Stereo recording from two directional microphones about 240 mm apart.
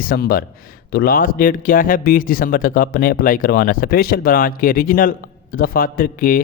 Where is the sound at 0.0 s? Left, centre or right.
Left.